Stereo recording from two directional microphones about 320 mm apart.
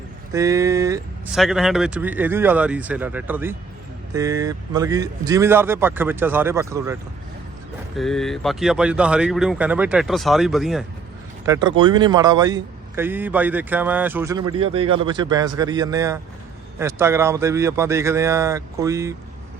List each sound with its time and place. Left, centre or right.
0.3 s a man's voice: centre
7.9 s a man's voice: centre